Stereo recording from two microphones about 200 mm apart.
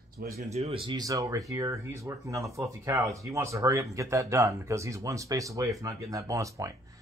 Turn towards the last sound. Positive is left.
turn(degrees=-15)  # may be behind; listen again after turning